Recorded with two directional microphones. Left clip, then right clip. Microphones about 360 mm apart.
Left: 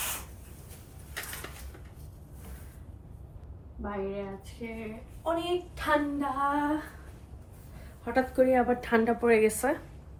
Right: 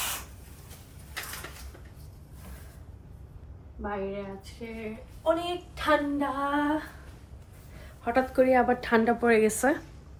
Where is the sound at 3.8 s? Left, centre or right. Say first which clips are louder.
Right 1 dB; centre.